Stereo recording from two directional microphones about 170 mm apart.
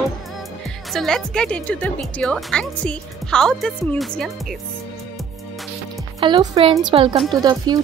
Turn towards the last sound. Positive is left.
turn(degrees=-25)  # may be behind; listen again after turning